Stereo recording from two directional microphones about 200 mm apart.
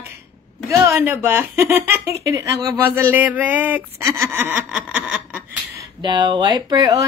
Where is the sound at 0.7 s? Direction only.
15° right (ahead or behind).